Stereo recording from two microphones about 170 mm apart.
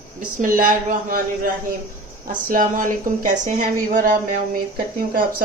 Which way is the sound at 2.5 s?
50° right (ahead or behind).